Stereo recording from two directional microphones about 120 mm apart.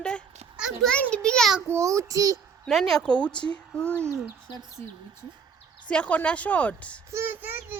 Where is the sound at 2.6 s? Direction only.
5° left (ahead or behind).